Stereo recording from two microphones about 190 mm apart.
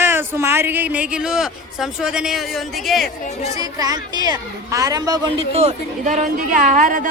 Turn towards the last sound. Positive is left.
turn(degrees=-40)  # may be behind; listen again after turning